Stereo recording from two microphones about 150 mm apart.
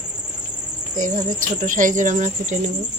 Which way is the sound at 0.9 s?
60° right (ahead or behind).